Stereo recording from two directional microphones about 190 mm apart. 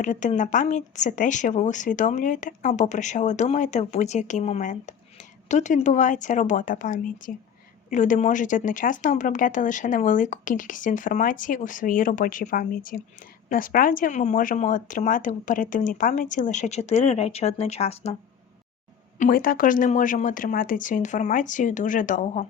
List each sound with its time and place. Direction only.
0.0 s speech: 40° left (ahead or behind)
19.2 s speech: 50° left (ahead or behind)